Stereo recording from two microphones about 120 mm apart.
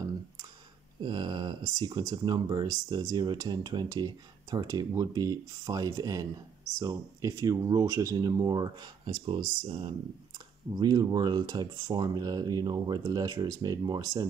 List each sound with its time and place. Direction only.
1.0 s speech: 40° right (ahead or behind)
10.7 s speech: 35° right (ahead or behind)